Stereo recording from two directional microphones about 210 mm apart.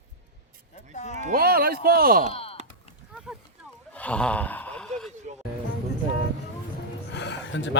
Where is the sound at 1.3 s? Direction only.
45° right (ahead or behind).